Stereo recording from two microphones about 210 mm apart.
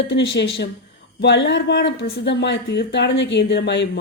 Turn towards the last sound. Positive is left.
turn(degrees=55)  # may be behind; listen again after turning